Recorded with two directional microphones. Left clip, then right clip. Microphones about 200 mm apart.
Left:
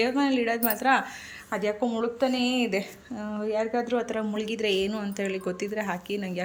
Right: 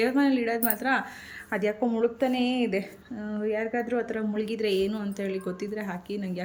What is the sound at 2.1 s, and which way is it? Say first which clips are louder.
Speech: left 1 dB; 25° left (ahead or behind).